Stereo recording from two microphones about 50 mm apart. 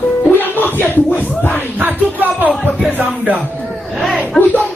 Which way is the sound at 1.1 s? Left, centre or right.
Left.